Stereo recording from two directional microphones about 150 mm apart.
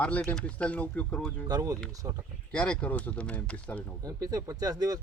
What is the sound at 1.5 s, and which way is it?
Speech, 25° right (ahead or behind).